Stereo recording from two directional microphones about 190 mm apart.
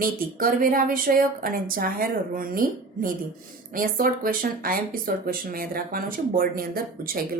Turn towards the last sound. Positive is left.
turn(degrees=-50)  # may be behind; listen again after turning